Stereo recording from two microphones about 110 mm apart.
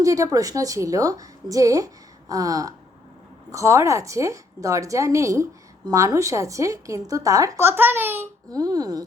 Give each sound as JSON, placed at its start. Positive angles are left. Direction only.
{"t": 0.0, "sound": "a woman's voice", "side_deg": -30}
{"t": 7.6, "sound": "a woman's voice", "side_deg": -20}
{"t": 8.4, "sound": "a woman's voice", "side_deg": -35}